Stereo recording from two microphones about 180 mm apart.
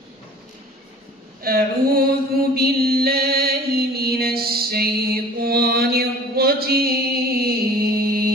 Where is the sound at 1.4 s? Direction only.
55° right (ahead or behind).